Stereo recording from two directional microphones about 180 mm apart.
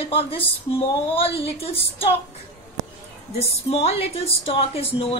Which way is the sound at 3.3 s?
35° left (ahead or behind).